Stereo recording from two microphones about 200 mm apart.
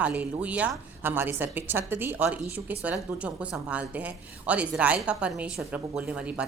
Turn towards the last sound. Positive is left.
turn(degrees=-5)  # may be behind; listen again after turning